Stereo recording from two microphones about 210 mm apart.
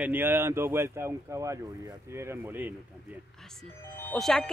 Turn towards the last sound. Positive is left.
turn(degrees=0)  # may be behind; listen again after turning